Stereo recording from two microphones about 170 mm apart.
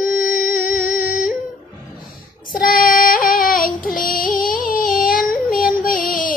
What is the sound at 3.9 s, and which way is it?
Yodeling, 55° left (ahead or behind).